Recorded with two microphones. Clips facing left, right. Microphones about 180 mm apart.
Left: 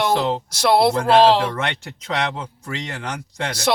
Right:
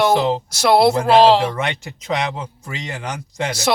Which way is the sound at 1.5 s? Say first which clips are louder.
Right 2 dB; 15° right (ahead or behind).